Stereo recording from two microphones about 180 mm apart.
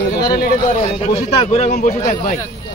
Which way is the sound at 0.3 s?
60° left (ahead or behind).